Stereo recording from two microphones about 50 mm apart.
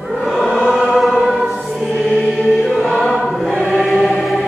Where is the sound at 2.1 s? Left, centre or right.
Left.